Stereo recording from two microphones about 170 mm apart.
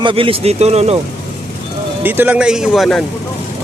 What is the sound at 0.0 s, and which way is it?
Speech, 30° right (ahead or behind).